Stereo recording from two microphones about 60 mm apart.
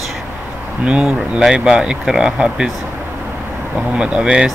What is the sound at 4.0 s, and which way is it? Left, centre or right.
Speech, centre.